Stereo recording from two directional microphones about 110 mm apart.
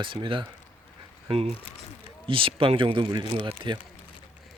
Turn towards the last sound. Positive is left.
turn(degrees=-50)  # may be behind; listen again after turning